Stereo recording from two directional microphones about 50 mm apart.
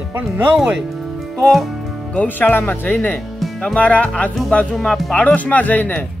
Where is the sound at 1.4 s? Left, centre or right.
Centre.